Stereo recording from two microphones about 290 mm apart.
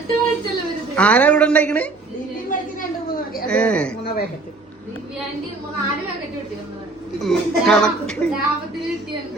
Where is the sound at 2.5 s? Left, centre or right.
Left.